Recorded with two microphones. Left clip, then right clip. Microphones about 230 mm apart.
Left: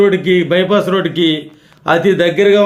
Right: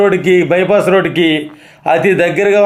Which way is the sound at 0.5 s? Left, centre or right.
Right.